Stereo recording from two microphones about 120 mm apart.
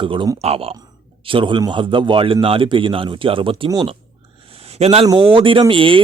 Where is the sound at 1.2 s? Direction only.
45° right (ahead or behind).